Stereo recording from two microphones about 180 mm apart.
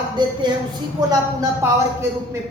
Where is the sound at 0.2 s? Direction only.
25° right (ahead or behind).